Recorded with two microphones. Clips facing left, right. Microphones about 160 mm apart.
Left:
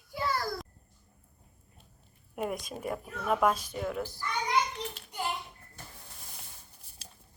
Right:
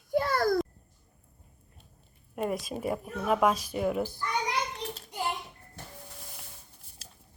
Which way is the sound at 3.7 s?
15° right (ahead or behind).